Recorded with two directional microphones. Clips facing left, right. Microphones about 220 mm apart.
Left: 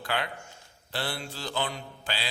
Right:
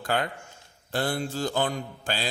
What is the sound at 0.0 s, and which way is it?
Speech, 45° right (ahead or behind).